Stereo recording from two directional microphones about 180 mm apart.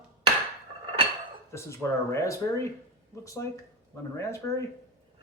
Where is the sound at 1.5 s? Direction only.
15° left (ahead or behind).